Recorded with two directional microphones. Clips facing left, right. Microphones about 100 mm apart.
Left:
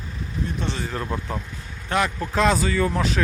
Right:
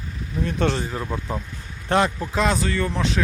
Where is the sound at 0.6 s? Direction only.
65° right (ahead or behind).